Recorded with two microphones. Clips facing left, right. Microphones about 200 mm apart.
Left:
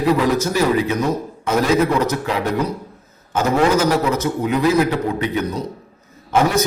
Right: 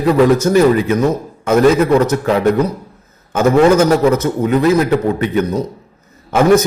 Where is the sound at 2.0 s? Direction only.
50° right (ahead or behind).